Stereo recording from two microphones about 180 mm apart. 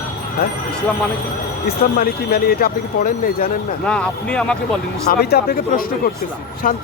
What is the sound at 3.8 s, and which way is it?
Speech, 5° left (ahead or behind).